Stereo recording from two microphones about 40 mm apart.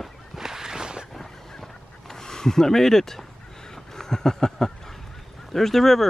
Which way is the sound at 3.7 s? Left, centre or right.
Centre.